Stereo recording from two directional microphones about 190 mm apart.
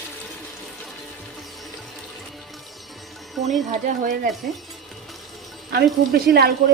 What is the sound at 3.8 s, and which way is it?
Speech, 45° right (ahead or behind).